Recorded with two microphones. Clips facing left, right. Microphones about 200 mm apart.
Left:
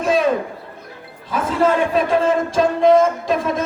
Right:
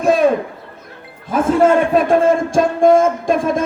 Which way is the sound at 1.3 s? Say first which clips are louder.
Right 5 dB; 50° right (ahead or behind).